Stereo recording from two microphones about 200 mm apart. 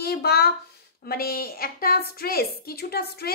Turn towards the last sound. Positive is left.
turn(degrees=50)  # may be behind; listen again after turning